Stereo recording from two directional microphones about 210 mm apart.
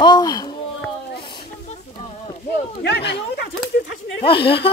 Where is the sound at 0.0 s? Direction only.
20° left (ahead or behind).